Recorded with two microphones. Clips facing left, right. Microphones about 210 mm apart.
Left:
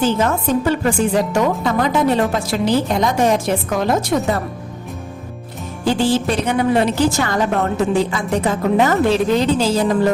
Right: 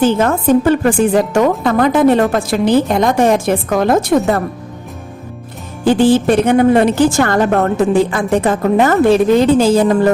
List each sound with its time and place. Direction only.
0.0 s a woman's voice: 55° right (ahead or behind)
5.8 s a woman's voice: 55° right (ahead or behind)